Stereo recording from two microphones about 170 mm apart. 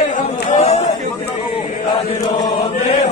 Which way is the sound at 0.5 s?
40° left (ahead or behind).